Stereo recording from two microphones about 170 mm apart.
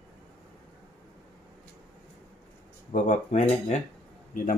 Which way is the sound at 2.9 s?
45° left (ahead or behind).